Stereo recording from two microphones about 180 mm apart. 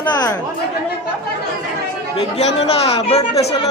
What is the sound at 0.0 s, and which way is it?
Chatter, 20° left (ahead or behind).